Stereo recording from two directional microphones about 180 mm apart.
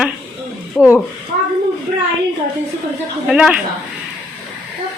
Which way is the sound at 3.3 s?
5° right (ahead or behind).